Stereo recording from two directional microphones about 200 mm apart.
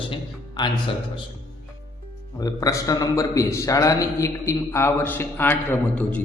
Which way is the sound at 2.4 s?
15° left (ahead or behind).